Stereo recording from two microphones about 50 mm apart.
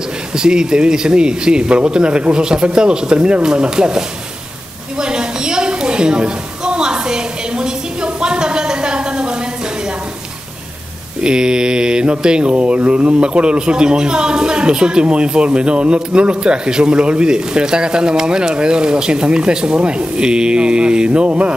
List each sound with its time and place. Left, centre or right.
0.3 s speech: centre
4.9 s a sound: centre
11.2 s mantra: centre